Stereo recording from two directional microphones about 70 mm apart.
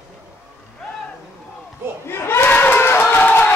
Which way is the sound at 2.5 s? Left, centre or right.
Left.